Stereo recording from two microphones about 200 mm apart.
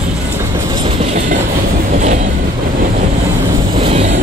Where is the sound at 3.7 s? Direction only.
30° right (ahead or behind).